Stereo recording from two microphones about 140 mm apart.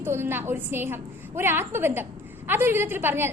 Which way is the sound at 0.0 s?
15° right (ahead or behind).